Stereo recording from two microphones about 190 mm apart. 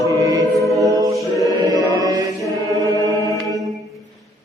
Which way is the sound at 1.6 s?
20° right (ahead or behind).